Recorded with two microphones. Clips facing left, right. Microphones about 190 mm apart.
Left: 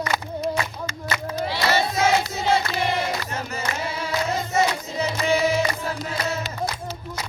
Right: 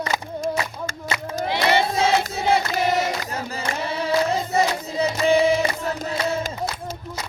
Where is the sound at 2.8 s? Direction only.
40° right (ahead or behind).